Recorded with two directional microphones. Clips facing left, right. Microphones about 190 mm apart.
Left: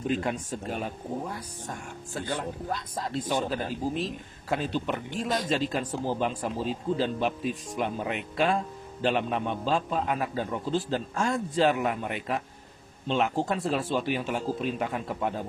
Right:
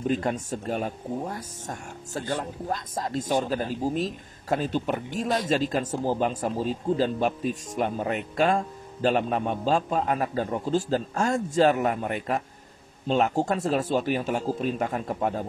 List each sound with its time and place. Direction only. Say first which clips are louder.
0.1 s speech: right 2 dB; 45° right (ahead or behind)